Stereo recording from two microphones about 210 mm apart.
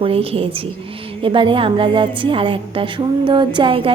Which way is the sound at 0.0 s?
25° right (ahead or behind).